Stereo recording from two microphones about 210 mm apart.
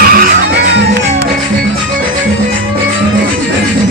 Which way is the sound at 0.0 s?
45° right (ahead or behind).